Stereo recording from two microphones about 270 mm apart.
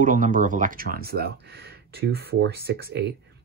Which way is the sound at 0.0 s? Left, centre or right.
Right.